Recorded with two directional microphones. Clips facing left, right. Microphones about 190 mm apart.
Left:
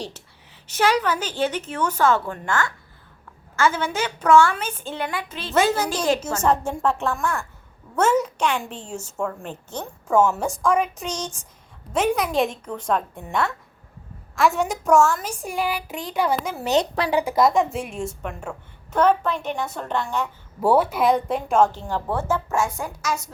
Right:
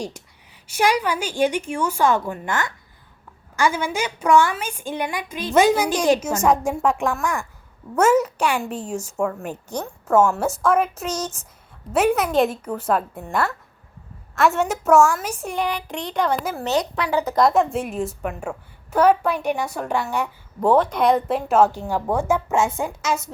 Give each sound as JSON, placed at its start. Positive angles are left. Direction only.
{"t": 0.7, "sound": "a woman's voice", "side_deg": -10}
{"t": 9.8, "sound": "a woman's voice", "side_deg": 0}
{"t": 17.1, "sound": "a woman's voice", "side_deg": 10}
{"t": 20.6, "sound": "a woman's voice", "side_deg": 5}